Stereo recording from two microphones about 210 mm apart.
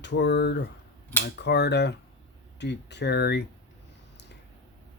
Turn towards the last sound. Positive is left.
turn(degrees=50)  # may be behind; listen again after turning